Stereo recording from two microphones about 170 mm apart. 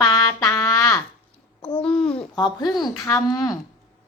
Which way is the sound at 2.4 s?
25° left (ahead or behind).